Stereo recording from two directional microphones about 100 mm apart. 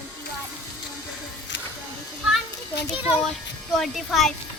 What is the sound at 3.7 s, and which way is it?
Music, centre (ahead or behind).